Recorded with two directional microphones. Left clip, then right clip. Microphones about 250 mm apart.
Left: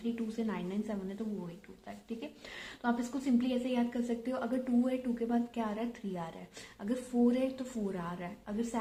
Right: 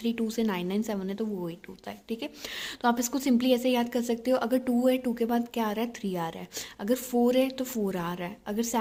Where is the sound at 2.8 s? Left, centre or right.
Right.